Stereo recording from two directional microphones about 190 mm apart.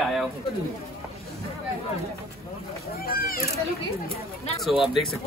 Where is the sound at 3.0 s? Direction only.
50° left (ahead or behind).